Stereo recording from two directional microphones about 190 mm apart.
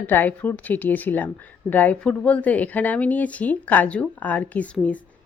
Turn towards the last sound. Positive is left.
turn(degrees=5)  # may be behind; listen again after turning